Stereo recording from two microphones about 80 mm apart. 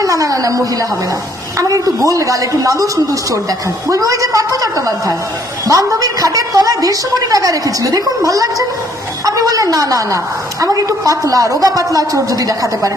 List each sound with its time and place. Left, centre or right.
0.0 s a woman's voice: right